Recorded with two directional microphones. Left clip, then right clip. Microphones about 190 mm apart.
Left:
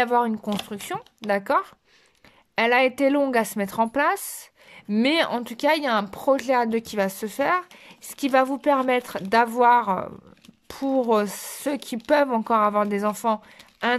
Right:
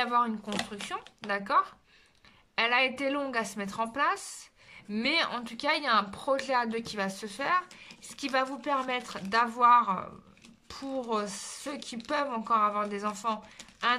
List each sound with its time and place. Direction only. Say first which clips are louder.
0.0 s speech: left 6 dB; 35° left (ahead or behind)